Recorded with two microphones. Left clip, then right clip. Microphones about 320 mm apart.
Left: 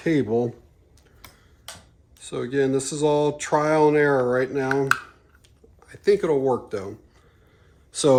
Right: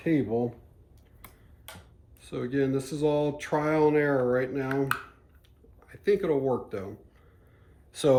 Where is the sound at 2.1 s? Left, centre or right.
Centre.